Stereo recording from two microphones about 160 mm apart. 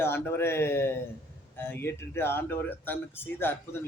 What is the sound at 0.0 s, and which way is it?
Speech, 15° left (ahead or behind).